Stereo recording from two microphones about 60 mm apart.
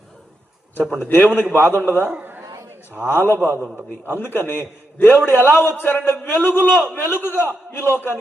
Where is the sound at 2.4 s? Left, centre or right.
Right.